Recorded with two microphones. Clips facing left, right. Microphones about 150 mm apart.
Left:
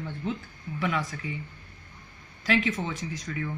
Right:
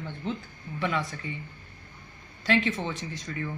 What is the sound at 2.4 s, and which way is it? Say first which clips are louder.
Speech: even; centre (ahead or behind).